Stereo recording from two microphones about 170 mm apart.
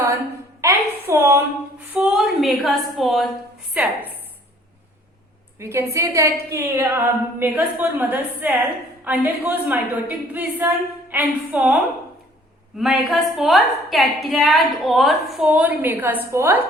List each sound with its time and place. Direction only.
0.6 s a woman's voice: 15° right (ahead or behind)
5.5 s a woman's voice: 15° right (ahead or behind)